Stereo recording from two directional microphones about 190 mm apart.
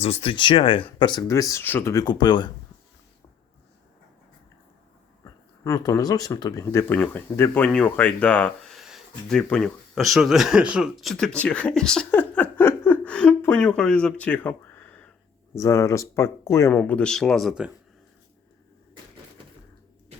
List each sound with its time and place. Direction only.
0.0 s speech: 30° left (ahead or behind)
5.2 s speech: 15° left (ahead or behind); by 17.7 s centre (ahead or behind)